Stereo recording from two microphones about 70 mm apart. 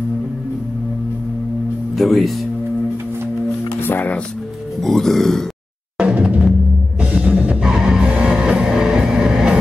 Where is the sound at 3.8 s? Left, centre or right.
Left.